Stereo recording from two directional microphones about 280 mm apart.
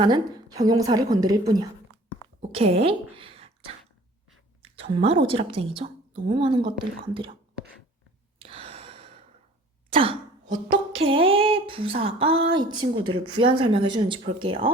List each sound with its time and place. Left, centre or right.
0.0 s a woman's voice: centre
2.5 s a sound: right
4.6 s a woman's voice: right
8.4 s gasp: centre
9.9 s throat clearing: centre
11.0 s a woman's voice: centre